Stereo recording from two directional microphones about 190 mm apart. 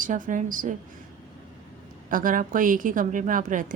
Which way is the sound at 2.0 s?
45° right (ahead or behind).